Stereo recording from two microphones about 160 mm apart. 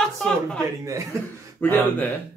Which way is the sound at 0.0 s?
5° left (ahead or behind).